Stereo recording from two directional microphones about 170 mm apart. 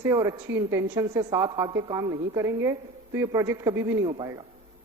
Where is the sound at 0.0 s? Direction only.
20° right (ahead or behind).